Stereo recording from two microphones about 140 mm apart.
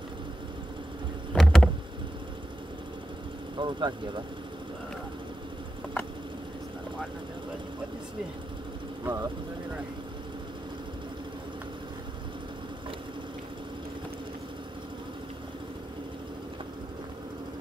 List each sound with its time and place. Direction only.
1.3 s vehicle: 5° left (ahead or behind)
3.5 s speech: 35° right (ahead or behind)
9.0 s speech: 25° right (ahead or behind)